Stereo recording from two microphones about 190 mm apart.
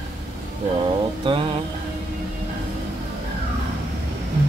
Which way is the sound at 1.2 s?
30° right (ahead or behind).